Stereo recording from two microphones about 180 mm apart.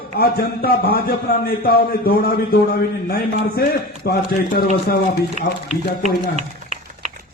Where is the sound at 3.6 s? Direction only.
60° left (ahead or behind).